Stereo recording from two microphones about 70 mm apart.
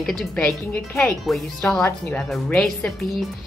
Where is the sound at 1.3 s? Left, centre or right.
Centre.